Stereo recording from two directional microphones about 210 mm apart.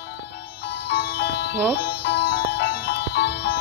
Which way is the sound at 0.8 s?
55° left (ahead or behind).